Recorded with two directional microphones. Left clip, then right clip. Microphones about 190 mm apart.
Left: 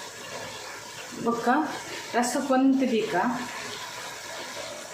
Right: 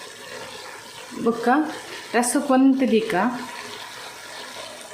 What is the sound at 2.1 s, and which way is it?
Speech, 40° right (ahead or behind).